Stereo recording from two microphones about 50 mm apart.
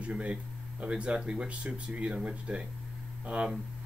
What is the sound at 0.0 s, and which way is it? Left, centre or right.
Speech, right.